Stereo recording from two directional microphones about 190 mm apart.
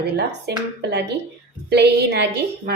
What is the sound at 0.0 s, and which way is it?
A woman's voice, 60° right (ahead or behind).